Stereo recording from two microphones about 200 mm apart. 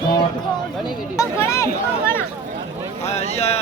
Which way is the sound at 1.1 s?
15° left (ahead or behind).